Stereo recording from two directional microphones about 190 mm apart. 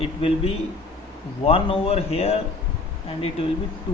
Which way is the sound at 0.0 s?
30° left (ahead or behind).